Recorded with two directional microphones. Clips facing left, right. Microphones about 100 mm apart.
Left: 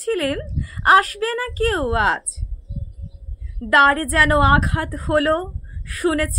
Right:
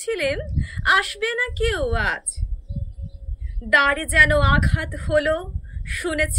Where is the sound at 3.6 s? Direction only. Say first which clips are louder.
Left 5 dB; 35° left (ahead or behind).